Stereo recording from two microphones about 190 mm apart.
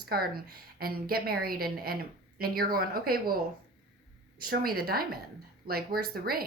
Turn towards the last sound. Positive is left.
turn(degrees=-50)  # may be behind; listen again after turning